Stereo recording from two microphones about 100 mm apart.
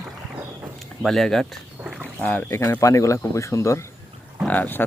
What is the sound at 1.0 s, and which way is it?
Speech, 5° left (ahead or behind).